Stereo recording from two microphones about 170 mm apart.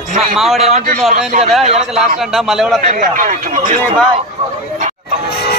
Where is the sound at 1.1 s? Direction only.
40° right (ahead or behind).